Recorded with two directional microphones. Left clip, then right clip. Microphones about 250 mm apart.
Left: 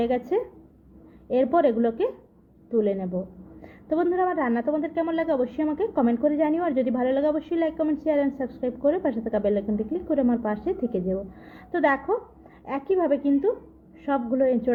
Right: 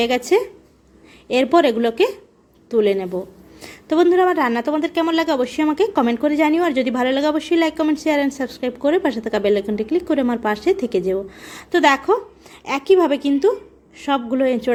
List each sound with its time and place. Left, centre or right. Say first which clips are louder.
1.3 s a woman's voice: right 6 dB; right